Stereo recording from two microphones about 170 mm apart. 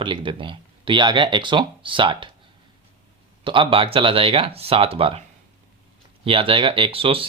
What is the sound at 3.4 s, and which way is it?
Speech, 30° right (ahead or behind).